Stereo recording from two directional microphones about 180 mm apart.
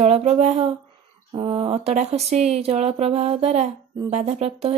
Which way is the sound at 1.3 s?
25° right (ahead or behind).